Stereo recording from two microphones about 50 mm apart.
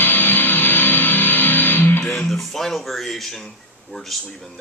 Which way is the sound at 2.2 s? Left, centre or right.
Centre.